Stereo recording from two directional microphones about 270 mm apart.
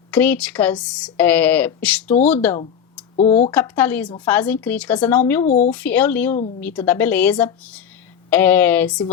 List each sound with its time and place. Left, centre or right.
0.1 s speech: centre
3.2 s speech: left
3.5 s speech: centre
5.5 s speech: left
5.7 s a woman's voice: centre